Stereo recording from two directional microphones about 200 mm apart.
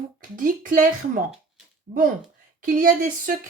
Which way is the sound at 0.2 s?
40° right (ahead or behind).